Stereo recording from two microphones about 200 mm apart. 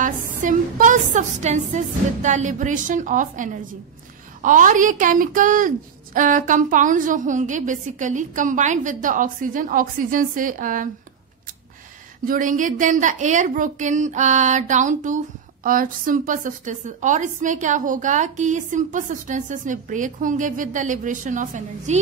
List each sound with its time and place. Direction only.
0.4 s a woman's voice: 40° right (ahead or behind)
12.3 s a woman's voice: 40° right (ahead or behind)